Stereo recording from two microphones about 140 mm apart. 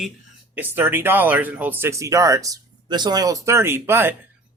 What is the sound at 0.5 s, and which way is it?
Speech, 15° right (ahead or behind).